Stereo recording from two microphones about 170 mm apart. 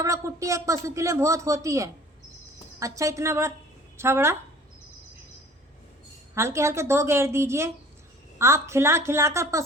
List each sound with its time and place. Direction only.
0.0 s a woman's voice: 20° right (ahead or behind)
6.3 s speech: 15° right (ahead or behind)